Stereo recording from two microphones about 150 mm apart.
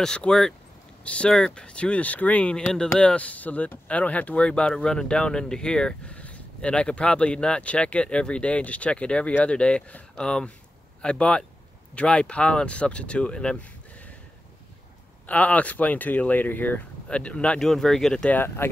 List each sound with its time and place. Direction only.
0.0 s speech: 5° left (ahead or behind)
15.2 s speech: 10° left (ahead or behind)